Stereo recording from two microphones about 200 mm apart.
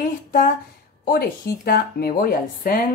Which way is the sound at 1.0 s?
45° left (ahead or behind).